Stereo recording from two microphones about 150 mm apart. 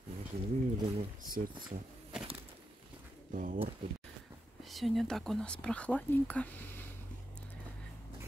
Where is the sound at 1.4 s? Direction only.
65° right (ahead or behind).